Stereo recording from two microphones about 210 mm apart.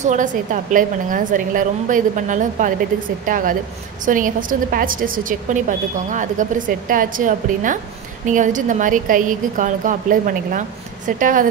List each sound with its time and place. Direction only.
0.0 s a woman's voice: 35° right (ahead or behind)